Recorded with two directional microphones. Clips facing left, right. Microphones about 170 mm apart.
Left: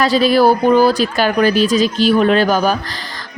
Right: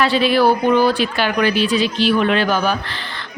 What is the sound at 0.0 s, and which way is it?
Speech, 40° left (ahead or behind).